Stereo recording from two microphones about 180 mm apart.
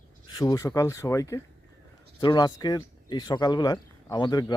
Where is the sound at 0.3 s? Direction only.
20° left (ahead or behind).